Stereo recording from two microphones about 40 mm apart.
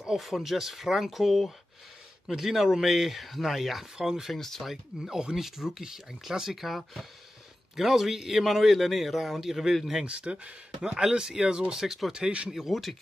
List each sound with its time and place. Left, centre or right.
0.0 s a man's voice: centre
4.3 s speech: centre
4.6 s a man's voice: centre
10.0 s speech: right
10.8 s speech: centre